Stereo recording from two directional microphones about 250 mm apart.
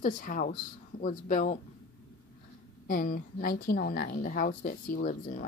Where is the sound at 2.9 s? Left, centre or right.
Left.